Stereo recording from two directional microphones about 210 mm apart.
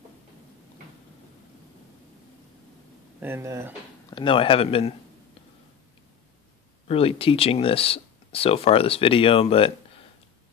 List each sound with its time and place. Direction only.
3.2 s speech: 10° right (ahead or behind)
4.1 s speech: 25° left (ahead or behind)
6.9 s speech: 25° left (ahead or behind)